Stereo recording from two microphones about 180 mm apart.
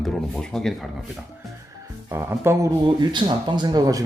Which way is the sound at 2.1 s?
15° right (ahead or behind).